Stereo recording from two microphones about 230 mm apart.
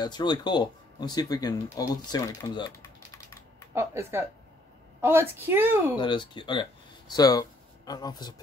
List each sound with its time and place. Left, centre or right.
0.0 s speech: centre
3.7 s a woman's voice: centre
5.9 s speech: centre